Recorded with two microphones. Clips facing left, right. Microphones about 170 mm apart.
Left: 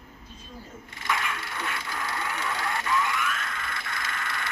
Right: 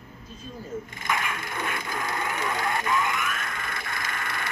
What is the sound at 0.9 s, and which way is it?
Speech, 50° right (ahead or behind).